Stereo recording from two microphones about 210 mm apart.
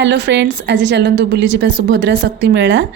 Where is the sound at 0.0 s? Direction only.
55° right (ahead or behind).